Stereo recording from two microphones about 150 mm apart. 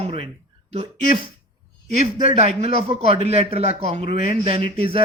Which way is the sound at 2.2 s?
45° right (ahead or behind).